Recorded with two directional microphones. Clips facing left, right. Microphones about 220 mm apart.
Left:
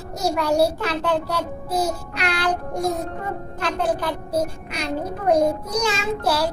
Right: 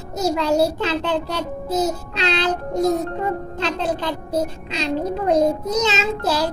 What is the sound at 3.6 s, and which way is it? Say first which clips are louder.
A child's voice: left 1 dB; 25° right (ahead or behind).